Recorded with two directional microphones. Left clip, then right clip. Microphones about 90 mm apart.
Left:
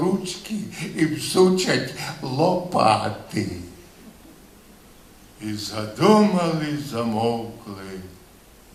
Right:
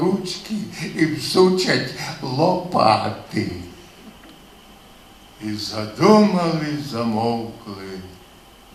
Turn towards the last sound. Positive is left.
turn(degrees=20)  # may be behind; listen again after turning